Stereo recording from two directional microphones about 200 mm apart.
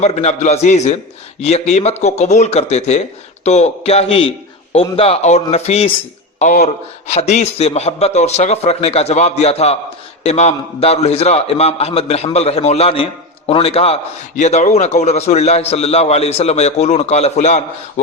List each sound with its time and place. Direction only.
0.0 s a man's voice: 30° left (ahead or behind)